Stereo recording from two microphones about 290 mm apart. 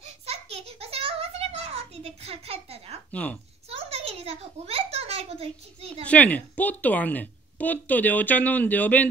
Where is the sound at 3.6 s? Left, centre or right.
Right.